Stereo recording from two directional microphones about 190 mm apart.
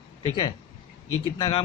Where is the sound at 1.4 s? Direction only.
30° left (ahead or behind).